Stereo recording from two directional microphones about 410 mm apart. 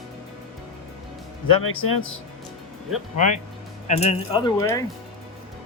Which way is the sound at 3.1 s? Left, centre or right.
Centre.